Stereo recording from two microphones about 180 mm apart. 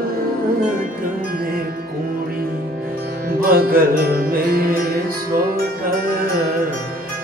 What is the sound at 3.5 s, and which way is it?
Music, 55° right (ahead or behind).